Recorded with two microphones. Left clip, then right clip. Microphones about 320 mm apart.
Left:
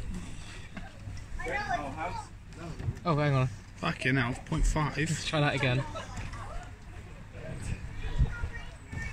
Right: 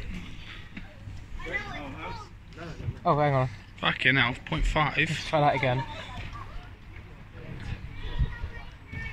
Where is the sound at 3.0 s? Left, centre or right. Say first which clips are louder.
Right 6 dB; right.